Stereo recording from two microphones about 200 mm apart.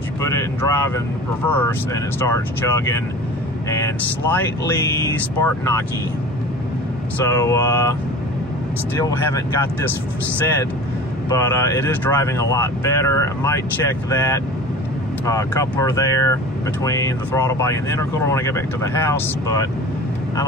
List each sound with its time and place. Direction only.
0.2 s speech: 15° left (ahead or behind)
5.4 s speech: 15° left (ahead or behind)
7.2 s speech: 15° left (ahead or behind)
9.0 s speech: 15° left (ahead or behind)
11.2 s speech: 15° left (ahead or behind)